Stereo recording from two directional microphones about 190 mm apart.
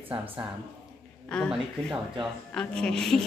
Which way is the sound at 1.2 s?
5° left (ahead or behind).